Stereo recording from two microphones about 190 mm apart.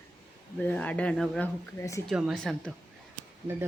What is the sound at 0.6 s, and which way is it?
Speech, 5° left (ahead or behind).